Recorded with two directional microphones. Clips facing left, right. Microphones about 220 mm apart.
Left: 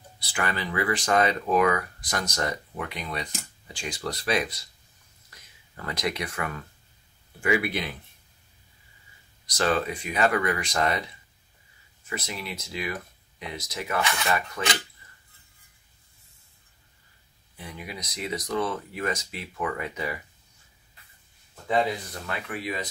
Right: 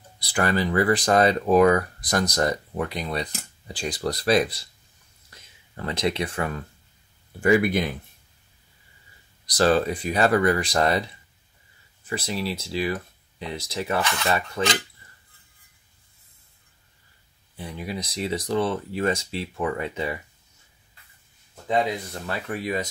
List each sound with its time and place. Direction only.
0.2 s speech: 40° right (ahead or behind)
5.8 s speech: 25° right (ahead or behind)
7.4 s speech: 45° right (ahead or behind)
9.5 s speech: 35° right (ahead or behind)
17.6 s speech: 30° right (ahead or behind)
22.2 s speech: 40° right (ahead or behind)